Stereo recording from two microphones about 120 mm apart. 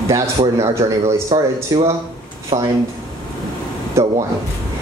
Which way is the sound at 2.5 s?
55° right (ahead or behind).